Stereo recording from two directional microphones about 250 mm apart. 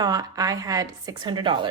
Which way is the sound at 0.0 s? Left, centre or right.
Centre.